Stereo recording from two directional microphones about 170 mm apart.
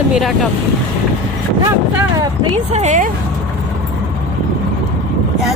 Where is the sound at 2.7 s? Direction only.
45° right (ahead or behind).